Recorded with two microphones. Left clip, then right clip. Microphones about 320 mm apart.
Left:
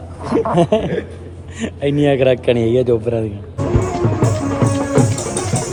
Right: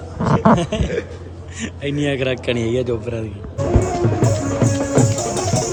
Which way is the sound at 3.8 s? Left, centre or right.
Centre.